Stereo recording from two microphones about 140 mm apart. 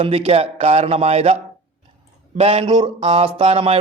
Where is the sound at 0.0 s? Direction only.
45° right (ahead or behind).